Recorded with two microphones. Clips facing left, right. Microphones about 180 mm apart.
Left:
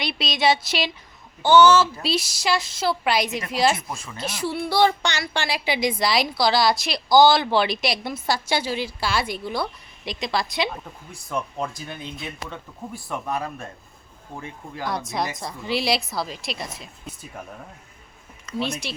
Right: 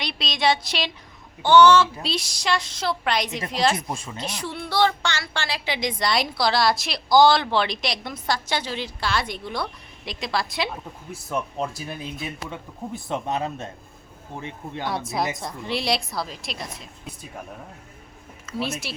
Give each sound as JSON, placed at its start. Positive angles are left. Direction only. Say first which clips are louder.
{"t": 0.0, "sound": "a woman's voice", "louder": "left 2 dB", "side_deg": 5}
{"t": 3.8, "sound": "speech", "louder": "right 3 dB", "side_deg": -25}
{"t": 4.2, "sound": "a woman's voice", "louder": "left 4 dB", "side_deg": 5}
{"t": 12.5, "sound": "speech", "louder": "right 2 dB", "side_deg": -20}
{"t": 14.8, "sound": "a woman's voice", "louder": "even", "side_deg": 0}
{"t": 18.4, "sound": "a woman's voice", "louder": "left 1 dB", "side_deg": -5}